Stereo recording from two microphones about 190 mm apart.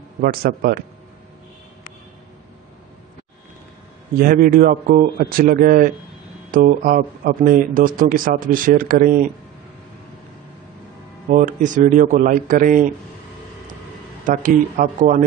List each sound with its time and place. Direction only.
0.2 s speech: 50° right (ahead or behind)
4.2 s speech: 50° right (ahead or behind)
11.2 s speech: 40° right (ahead or behind)
14.2 s speech: 45° right (ahead or behind)